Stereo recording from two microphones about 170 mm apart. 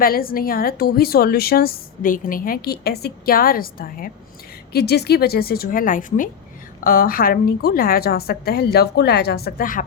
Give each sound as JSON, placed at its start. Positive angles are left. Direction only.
{"t": 0.0, "sound": "a woman's voice", "side_deg": 60}
{"t": 4.7, "sound": "a woman's voice", "side_deg": 70}